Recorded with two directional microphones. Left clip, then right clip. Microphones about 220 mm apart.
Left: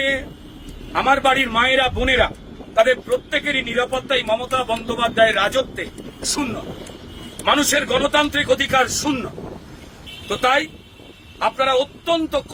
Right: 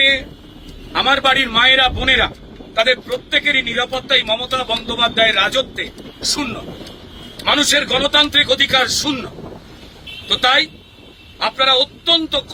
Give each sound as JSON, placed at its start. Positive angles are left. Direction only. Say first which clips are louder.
{"t": 0.9, "sound": "a man's voice", "louder": "right 2 dB", "side_deg": 20}
{"t": 7.4, "sound": "a man's voice", "louder": "right 3 dB", "side_deg": 10}
{"t": 10.2, "sound": "a man's voice", "louder": "right 4 dB", "side_deg": 20}